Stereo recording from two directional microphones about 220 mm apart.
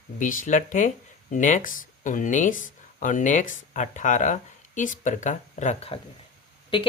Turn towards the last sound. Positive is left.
turn(degrees=20)  # may be behind; listen again after turning